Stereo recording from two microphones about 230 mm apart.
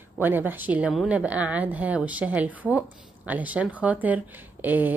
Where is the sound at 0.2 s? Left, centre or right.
Centre.